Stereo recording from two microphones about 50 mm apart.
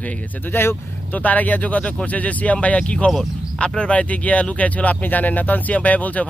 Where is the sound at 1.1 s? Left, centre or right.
Left.